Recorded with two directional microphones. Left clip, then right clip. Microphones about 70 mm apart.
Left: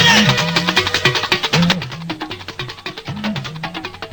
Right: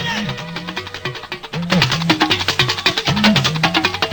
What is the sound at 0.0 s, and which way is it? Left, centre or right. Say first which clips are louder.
Music: left 11 dB; left.